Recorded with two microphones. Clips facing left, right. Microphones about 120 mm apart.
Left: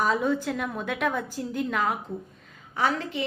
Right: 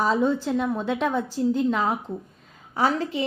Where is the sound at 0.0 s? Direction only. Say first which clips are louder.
Right 3 dB; 30° right (ahead or behind).